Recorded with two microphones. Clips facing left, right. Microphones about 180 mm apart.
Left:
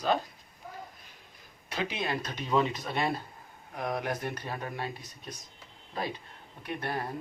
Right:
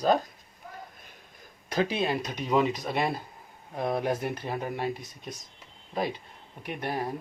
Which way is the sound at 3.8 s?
30° right (ahead or behind).